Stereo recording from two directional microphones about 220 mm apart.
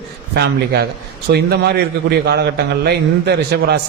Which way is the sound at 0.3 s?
45° right (ahead or behind).